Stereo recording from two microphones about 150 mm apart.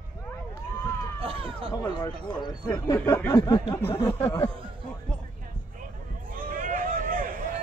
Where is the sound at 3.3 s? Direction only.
25° left (ahead or behind).